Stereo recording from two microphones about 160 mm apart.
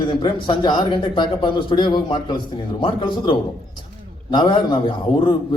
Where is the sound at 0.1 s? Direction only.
30° left (ahead or behind).